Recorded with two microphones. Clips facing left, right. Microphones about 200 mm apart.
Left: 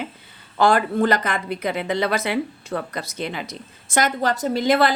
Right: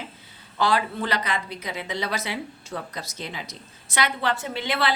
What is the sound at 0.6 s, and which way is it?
A woman's voice, 50° left (ahead or behind).